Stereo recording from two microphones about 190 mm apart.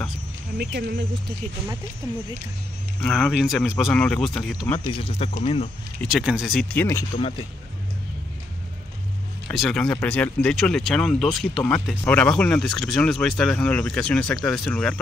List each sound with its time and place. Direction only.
0.6 s speech: 60° right (ahead or behind)
3.0 s speech: centre (ahead or behind)
4.8 s speech: 30° left (ahead or behind)
6.0 s speech: centre (ahead or behind)
7.2 s speech: 30° left (ahead or behind)
9.5 s speech: centre (ahead or behind)